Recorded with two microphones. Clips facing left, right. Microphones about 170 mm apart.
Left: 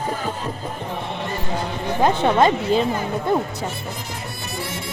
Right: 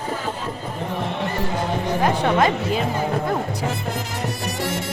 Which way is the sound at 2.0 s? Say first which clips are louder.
Left 3 dB; 30° left (ahead or behind).